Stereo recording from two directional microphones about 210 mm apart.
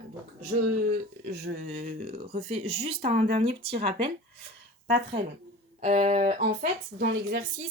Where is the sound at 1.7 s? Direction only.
30° right (ahead or behind).